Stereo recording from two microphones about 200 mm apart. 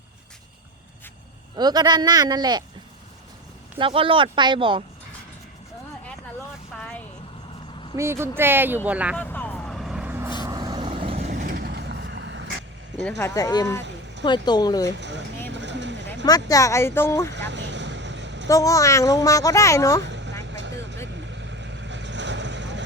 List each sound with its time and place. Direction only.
1.5 s speech: 20° right (ahead or behind)
3.8 s speech: 25° right (ahead or behind)
6.7 s vehicle: 5° left (ahead or behind)
7.9 s speech: 15° right (ahead or behind)
9.1 s vehicle: 10° left (ahead or behind); by 10.3 s 10° right (ahead or behind)
10.4 s vehicle: 20° right (ahead or behind)
11.3 s vehicle: 55° right (ahead or behind)
13.0 s speech: 10° left (ahead or behind)
14.9 s speech: 60° right (ahead or behind)
15.5 s vehicle: 60° right (ahead or behind)
16.2 s speech: 15° left (ahead or behind)
17.3 s vehicle: 60° right (ahead or behind)
18.4 s speech: 15° left (ahead or behind)
20.0 s vehicle: 60° right (ahead or behind)